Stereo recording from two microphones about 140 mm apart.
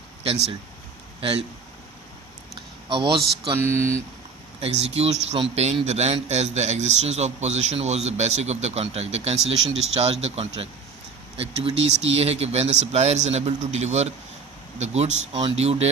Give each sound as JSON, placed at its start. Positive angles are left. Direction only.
{"t": 0.2, "sound": "a man's voice", "side_deg": -45}
{"t": 2.9, "sound": "a man's voice", "side_deg": -35}
{"t": 3.5, "sound": "speech", "side_deg": -20}
{"t": 4.6, "sound": "speech", "side_deg": -45}
{"t": 15.3, "sound": "a man's voice", "side_deg": -30}
{"t": 15.5, "sound": "speech", "side_deg": -50}